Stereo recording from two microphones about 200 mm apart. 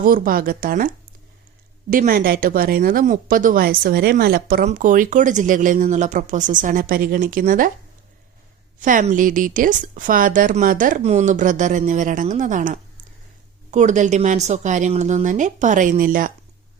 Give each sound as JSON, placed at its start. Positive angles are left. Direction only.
{"t": 0.0, "sound": "speech", "side_deg": -45}
{"t": 1.9, "sound": "speech", "side_deg": -45}
{"t": 8.8, "sound": "a woman's voice", "side_deg": -40}